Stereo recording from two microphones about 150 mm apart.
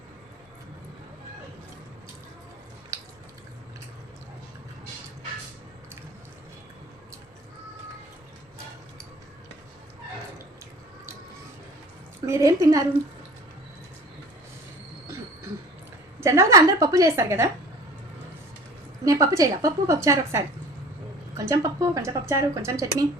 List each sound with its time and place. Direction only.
12.2 s speech: 20° right (ahead or behind)
16.2 s a woman's voice: 20° right (ahead or behind)
19.0 s speech: 20° right (ahead or behind)